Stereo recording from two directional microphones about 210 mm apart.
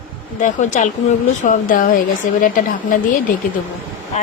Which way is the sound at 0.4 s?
35° left (ahead or behind).